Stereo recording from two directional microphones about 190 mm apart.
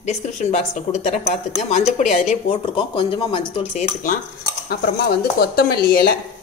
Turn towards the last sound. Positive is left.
turn(degrees=50)  # may be behind; listen again after turning